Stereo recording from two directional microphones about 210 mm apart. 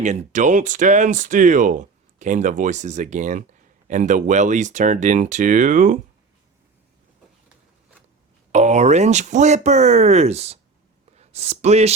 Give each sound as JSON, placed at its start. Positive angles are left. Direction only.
{"t": 0.0, "sound": "speech", "side_deg": -35}
{"t": 8.5, "sound": "speech", "side_deg": -35}